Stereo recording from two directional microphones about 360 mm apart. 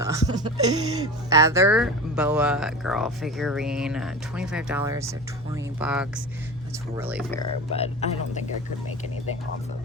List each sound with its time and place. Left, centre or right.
0.0 s speech: centre
7.7 s speech: centre